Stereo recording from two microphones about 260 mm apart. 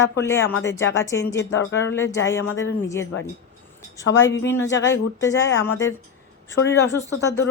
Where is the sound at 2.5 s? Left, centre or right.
Left.